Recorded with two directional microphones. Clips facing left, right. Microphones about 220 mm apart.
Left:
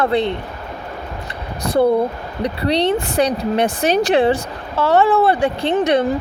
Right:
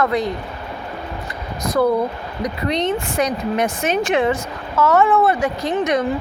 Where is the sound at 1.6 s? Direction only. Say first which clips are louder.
Left 2 dB; 30° left (ahead or behind).